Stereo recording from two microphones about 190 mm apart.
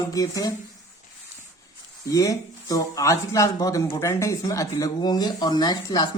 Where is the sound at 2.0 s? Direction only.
20° left (ahead or behind).